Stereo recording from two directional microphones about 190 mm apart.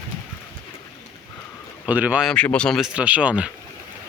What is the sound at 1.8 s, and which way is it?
Speech, 5° right (ahead or behind).